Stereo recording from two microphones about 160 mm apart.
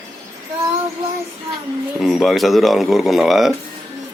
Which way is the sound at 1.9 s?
Centre (ahead or behind).